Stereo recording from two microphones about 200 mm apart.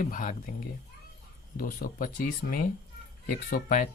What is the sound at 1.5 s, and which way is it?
Speech, 45° left (ahead or behind).